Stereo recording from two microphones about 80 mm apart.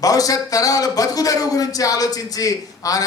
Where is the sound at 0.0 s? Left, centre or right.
Left.